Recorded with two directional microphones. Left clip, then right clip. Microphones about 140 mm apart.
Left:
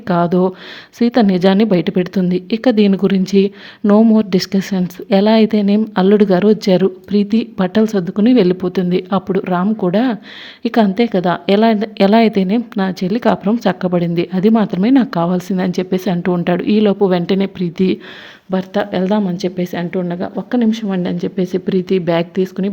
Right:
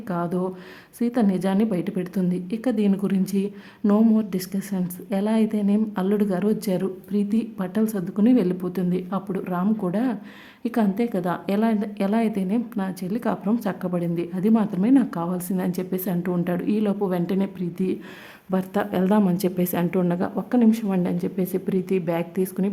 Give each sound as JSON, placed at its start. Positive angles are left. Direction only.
{"t": 0.1, "sound": "a woman's voice", "side_deg": 35}
{"t": 18.5, "sound": "a woman's voice", "side_deg": 15}
{"t": 20.3, "sound": "a woman's voice", "side_deg": 20}